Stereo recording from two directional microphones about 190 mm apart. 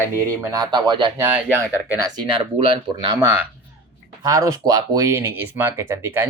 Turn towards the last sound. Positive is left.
turn(degrees=-10)  # may be behind; listen again after turning